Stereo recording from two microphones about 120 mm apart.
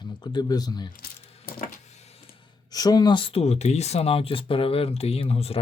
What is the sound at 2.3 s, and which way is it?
Speech, 40° left (ahead or behind).